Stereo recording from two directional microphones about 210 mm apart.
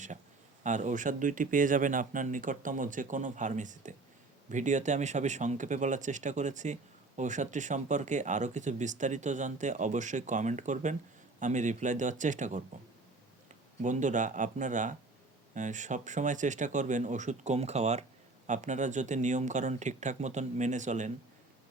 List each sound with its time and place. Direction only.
0.6 s speech: 35° right (ahead or behind)
13.8 s speech: 35° right (ahead or behind)